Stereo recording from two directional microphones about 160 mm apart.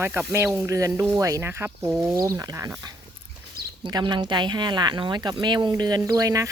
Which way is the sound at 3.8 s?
25° right (ahead or behind).